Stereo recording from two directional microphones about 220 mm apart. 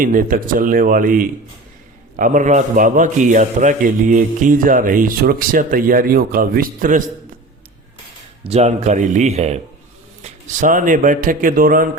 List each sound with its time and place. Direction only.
0.0 s a man's voice: 40° right (ahead or behind)
8.4 s a man's voice: 30° right (ahead or behind)